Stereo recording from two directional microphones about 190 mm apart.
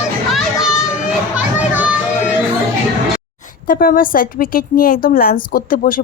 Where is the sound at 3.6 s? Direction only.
50° left (ahead or behind).